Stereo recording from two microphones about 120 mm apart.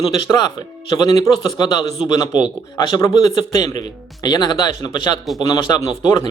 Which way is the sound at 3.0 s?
30° left (ahead or behind).